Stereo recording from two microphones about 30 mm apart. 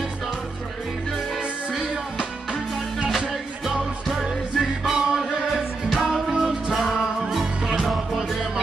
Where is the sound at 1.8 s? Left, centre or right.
Right.